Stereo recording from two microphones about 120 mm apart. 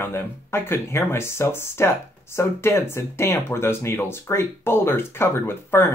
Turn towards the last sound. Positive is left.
turn(degrees=20)  # may be behind; listen again after turning